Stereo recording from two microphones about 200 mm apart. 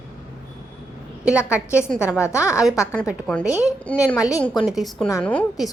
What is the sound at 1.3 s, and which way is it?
A woman's voice, 5° right (ahead or behind).